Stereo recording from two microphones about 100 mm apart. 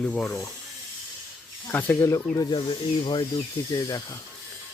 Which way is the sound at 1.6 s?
20° left (ahead or behind).